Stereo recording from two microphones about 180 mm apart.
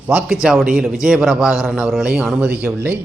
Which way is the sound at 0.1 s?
5° right (ahead or behind).